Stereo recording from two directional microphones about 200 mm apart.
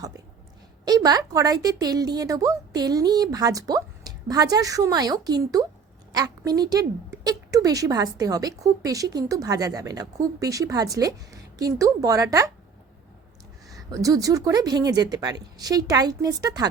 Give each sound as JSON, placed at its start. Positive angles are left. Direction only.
{"t": 0.9, "sound": "a woman's voice", "side_deg": -20}
{"t": 13.7, "sound": "a woman's voice", "side_deg": -15}